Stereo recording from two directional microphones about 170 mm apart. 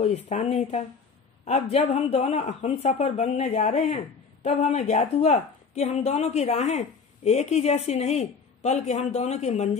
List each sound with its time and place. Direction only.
0.0 s speech: 40° left (ahead or behind)